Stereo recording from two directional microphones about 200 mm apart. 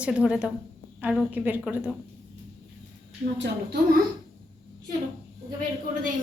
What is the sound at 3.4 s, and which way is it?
Speech, 55° right (ahead or behind).